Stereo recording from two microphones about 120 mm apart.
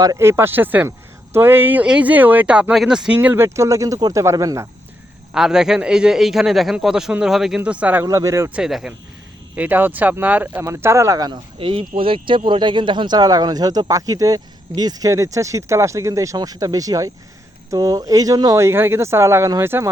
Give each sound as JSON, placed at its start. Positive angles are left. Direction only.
{"t": 0.2, "sound": "speech", "side_deg": -20}
{"t": 3.2, "sound": "speech", "side_deg": -20}
{"t": 5.3, "sound": "a man's voice", "side_deg": -5}
{"t": 8.0, "sound": "speech", "side_deg": -25}
{"t": 8.4, "sound": "speech", "side_deg": -5}
{"t": 11.6, "sound": "speech", "side_deg": -50}